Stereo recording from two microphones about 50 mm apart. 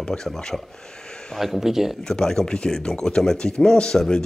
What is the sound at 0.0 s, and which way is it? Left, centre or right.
Speech, centre.